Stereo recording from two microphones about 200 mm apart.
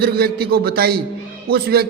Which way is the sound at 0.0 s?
50° right (ahead or behind).